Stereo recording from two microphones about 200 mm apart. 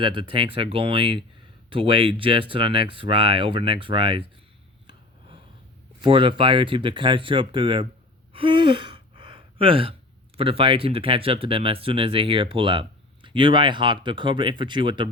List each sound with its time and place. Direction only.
0.0 s speech: 25° right (ahead or behind)
6.0 s speech: 25° right (ahead or behind)
8.3 s gasp: 25° right (ahead or behind)
10.3 s speech: 25° right (ahead or behind)